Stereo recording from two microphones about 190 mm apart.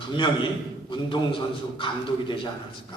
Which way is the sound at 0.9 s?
25° left (ahead or behind).